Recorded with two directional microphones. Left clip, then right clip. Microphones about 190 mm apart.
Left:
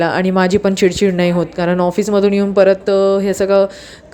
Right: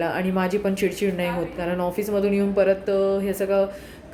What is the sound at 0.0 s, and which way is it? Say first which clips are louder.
A woman's voice: left 10 dB; 50° left (ahead or behind).